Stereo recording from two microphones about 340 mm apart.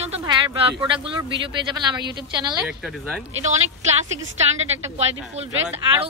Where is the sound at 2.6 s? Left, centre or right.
Centre.